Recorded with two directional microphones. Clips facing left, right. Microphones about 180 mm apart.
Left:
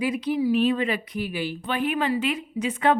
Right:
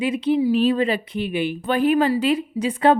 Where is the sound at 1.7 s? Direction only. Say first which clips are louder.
Right 7 dB; 40° right (ahead or behind).